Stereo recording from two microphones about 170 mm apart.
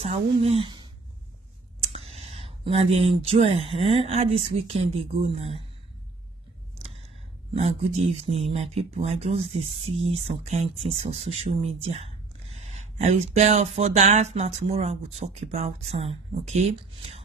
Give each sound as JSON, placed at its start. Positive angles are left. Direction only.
{"t": 0.0, "sound": "speech", "side_deg": -35}
{"t": 2.0, "sound": "speech", "side_deg": -35}
{"t": 7.5, "sound": "speech", "side_deg": -40}